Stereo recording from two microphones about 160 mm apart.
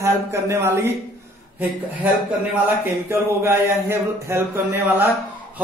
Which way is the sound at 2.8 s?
15° right (ahead or behind).